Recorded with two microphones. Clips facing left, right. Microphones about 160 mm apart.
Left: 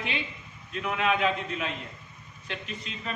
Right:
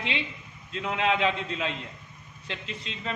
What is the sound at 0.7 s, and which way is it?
A man's voice, 25° right (ahead or behind).